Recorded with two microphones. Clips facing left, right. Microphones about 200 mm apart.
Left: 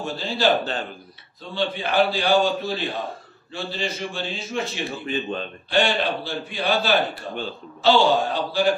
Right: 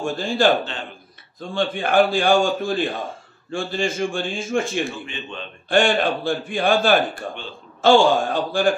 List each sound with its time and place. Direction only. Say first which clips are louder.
0.0 s a man's voice: right 4 dB; 50° right (ahead or behind)
5.0 s a man's voice: left 7 dB; 40° left (ahead or behind)
5.7 s a man's voice: right 4 dB; 50° right (ahead or behind)